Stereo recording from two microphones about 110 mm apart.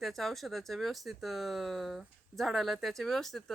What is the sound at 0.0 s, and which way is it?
Speech, centre (ahead or behind).